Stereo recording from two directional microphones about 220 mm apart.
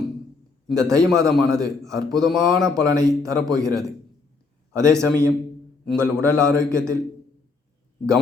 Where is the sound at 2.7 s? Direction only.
15° right (ahead or behind).